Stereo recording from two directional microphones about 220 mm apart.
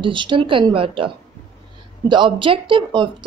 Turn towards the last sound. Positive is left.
turn(degrees=-20)  # may be behind; listen again after turning